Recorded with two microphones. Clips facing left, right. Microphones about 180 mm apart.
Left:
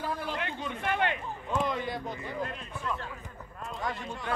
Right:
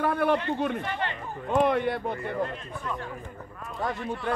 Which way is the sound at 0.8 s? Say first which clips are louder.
Left 2 dB; 60° left (ahead or behind).